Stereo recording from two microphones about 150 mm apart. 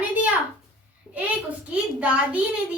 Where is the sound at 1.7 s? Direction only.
10° right (ahead or behind).